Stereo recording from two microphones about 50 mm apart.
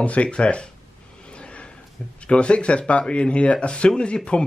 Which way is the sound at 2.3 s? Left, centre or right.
Left.